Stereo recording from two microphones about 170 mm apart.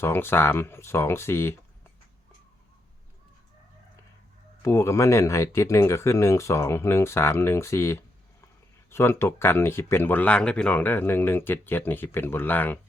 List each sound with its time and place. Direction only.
0.0 s speech: 15° left (ahead or behind)
4.6 s speech: 15° left (ahead or behind)